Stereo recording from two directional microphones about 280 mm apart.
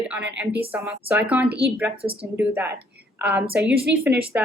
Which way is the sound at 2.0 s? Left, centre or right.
Centre.